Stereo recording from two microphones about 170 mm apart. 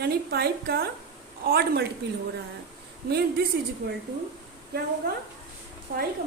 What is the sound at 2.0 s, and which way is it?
Speech, 80° right.